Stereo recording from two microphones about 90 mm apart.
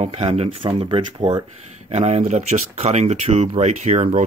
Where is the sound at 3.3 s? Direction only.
90° right.